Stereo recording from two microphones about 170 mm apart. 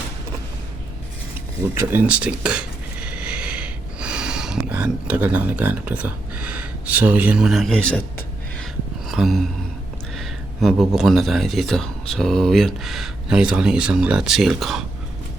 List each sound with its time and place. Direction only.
1.6 s speech: 15° right (ahead or behind); by 8.0 s 5° left (ahead or behind)
9.0 s a sound: centre (ahead or behind)
10.2 s speech: centre (ahead or behind)